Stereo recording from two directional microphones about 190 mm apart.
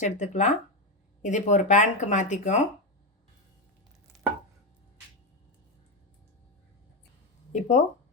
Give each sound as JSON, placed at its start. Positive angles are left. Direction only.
{"t": 0.0, "sound": "speech", "side_deg": 40}
{"t": 7.5, "sound": "speech", "side_deg": 40}